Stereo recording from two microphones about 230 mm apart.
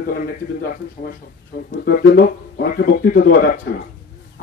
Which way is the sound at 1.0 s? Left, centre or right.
Left.